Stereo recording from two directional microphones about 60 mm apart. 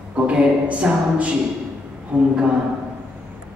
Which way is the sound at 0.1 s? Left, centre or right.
Centre.